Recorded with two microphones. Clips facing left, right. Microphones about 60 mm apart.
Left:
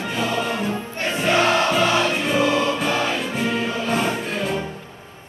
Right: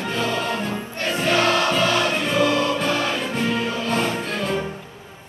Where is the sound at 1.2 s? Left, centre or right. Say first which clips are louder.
Left 1 dB; left.